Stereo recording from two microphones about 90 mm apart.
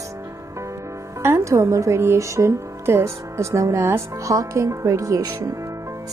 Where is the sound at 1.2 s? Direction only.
30° right (ahead or behind).